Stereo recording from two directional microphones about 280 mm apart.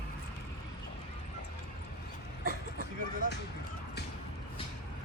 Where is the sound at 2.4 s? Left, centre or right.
Right.